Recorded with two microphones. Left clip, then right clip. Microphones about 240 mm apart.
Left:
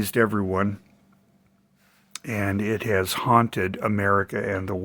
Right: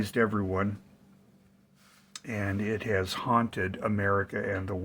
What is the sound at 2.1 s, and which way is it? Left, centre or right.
Speech, left.